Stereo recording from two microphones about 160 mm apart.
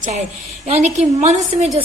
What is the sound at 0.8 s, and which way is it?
Speech, 45° right (ahead or behind).